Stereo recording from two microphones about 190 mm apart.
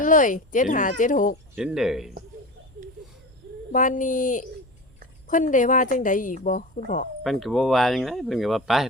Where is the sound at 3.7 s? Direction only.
45° left (ahead or behind).